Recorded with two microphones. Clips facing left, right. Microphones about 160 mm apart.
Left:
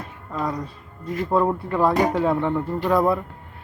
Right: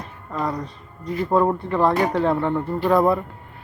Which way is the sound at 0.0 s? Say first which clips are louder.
Right 1 dB; centre (ahead or behind).